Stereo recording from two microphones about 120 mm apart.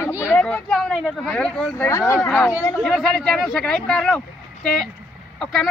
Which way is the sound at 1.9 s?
20° left (ahead or behind).